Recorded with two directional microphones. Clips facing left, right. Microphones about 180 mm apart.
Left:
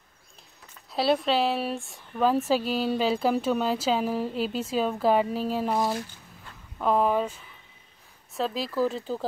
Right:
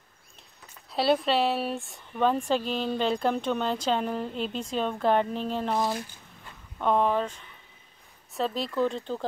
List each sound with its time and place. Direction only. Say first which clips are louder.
0.9 s speech: even; centre (ahead or behind)